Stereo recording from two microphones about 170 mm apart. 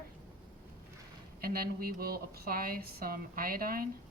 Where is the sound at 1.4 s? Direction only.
60° right (ahead or behind).